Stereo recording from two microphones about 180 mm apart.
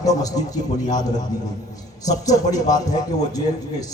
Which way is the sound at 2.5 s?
20° left (ahead or behind).